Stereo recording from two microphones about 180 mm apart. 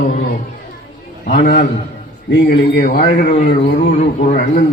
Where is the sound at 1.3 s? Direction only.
50° left (ahead or behind).